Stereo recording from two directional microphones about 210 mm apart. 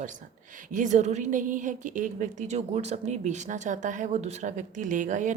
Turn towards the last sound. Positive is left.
turn(degrees=-35)  # may be behind; listen again after turning